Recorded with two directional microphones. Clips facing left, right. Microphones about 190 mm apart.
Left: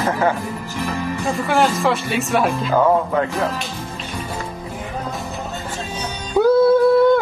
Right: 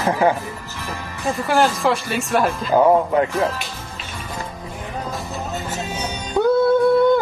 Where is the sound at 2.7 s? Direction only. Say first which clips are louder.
Right 3 dB; 15° right (ahead or behind).